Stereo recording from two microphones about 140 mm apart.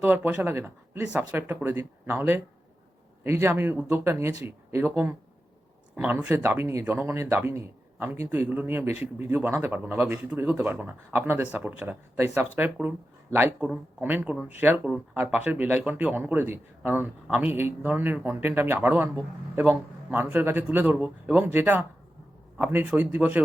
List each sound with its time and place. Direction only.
0.0 s speech: 10° right (ahead or behind)